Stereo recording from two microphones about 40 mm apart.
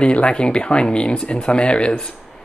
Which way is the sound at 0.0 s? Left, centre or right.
Left.